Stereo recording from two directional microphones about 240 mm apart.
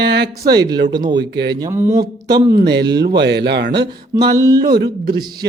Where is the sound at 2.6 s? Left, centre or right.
Right.